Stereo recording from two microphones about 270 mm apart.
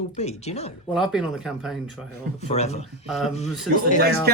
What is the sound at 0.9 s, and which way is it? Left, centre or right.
Speech, centre.